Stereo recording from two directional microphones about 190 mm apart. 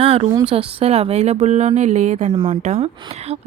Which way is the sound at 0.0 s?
30° right (ahead or behind).